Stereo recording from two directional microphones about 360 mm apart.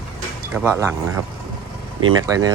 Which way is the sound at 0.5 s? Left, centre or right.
Centre.